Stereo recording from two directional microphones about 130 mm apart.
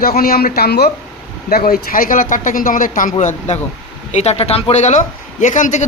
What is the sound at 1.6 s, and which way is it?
A man's voice, 90° left.